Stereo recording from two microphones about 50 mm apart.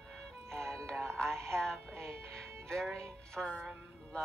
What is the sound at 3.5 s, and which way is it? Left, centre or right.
Music, centre.